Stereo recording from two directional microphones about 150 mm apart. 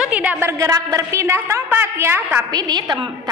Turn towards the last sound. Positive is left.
turn(degrees=-30)  # may be behind; listen again after turning